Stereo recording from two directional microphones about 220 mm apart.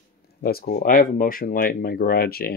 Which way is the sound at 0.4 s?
45° left (ahead or behind).